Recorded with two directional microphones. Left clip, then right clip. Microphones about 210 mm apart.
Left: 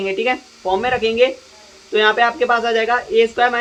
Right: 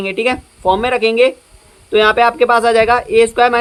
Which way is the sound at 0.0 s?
25° right (ahead or behind).